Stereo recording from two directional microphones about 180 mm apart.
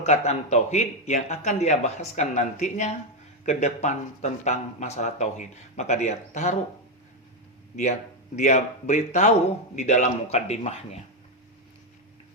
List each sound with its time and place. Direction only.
0.0 s speech: 40° left (ahead or behind)
8.4 s speech: 40° left (ahead or behind)